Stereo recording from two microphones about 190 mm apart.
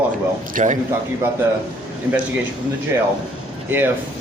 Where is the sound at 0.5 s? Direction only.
40° right (ahead or behind).